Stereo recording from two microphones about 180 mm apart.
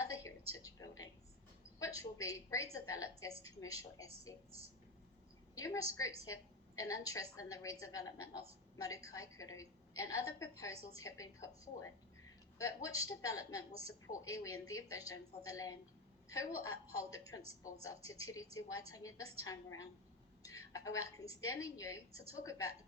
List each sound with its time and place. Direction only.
0.0 s a sound: 15° left (ahead or behind)
1.8 s a woman's voice: 20° left (ahead or behind)
5.5 s a woman's voice: 20° left (ahead or behind)